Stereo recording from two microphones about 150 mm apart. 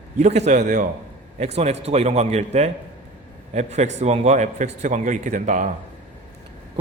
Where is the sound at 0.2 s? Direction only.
50° right (ahead or behind).